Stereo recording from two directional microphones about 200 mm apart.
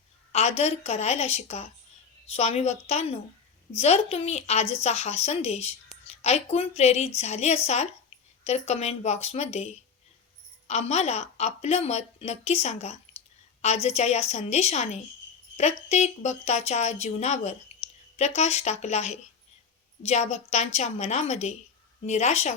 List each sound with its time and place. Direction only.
0.3 s a woman's voice: 30° left (ahead or behind)